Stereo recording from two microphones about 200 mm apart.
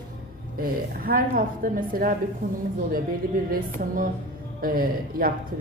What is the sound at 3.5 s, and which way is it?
A woman's voice, 45° right (ahead or behind).